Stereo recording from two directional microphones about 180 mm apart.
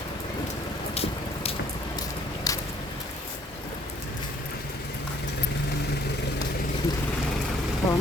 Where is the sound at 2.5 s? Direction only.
20° left (ahead or behind).